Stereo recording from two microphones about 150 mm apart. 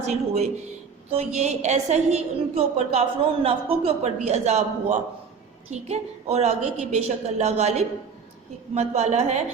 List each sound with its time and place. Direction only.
0.0 s a woman's voice: 50° right (ahead or behind)